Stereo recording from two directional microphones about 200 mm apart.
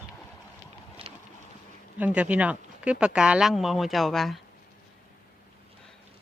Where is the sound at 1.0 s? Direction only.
25° right (ahead or behind).